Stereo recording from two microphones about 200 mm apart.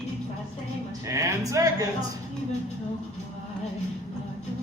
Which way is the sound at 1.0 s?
15° right (ahead or behind).